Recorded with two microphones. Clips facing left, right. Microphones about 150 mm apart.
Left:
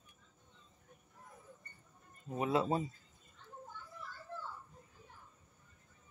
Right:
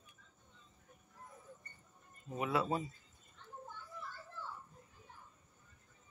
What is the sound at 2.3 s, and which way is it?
Speech, 30° left (ahead or behind).